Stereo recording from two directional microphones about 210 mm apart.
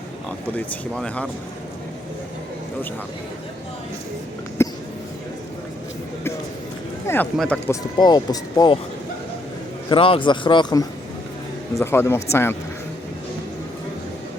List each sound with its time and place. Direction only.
0.3 s speech: 5° left (ahead or behind)
4.6 s a sound: 10° left (ahead or behind)
7.1 s speech: 5° left (ahead or behind)
7.9 s a man's voice: 20° left (ahead or behind)
9.9 s a man's voice: 25° left (ahead or behind)